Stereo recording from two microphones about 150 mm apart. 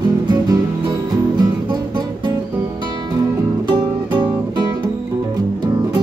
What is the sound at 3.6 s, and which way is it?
Music, 30° right (ahead or behind).